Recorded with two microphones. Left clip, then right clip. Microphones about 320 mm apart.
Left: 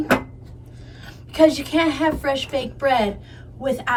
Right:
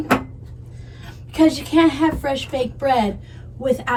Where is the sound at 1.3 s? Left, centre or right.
Centre.